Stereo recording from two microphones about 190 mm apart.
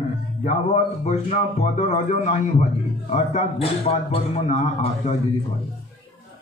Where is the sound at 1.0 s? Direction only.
35° left (ahead or behind).